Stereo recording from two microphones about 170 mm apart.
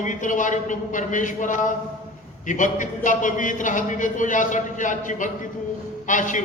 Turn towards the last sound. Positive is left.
turn(degrees=50)  # may be behind; listen again after turning